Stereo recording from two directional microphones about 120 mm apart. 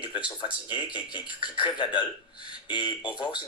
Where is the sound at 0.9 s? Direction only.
40° left (ahead or behind).